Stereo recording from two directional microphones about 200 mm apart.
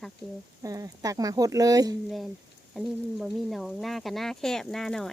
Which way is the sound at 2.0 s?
Centre (ahead or behind).